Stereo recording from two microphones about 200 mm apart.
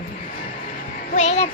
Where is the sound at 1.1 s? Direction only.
35° left (ahead or behind).